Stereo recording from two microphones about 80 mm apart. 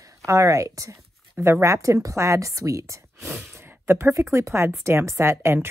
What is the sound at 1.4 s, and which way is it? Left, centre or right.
Speech, right.